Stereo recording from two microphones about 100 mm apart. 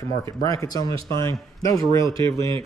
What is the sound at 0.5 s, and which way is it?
Speech, 35° left (ahead or behind).